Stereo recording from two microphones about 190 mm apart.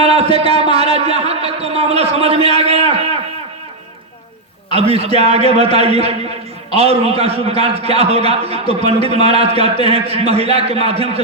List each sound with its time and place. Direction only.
0.0 s a sound: 30° right (ahead or behind)
0.6 s a man's voice: 30° right (ahead or behind)
4.8 s a man's voice: 30° right (ahead or behind)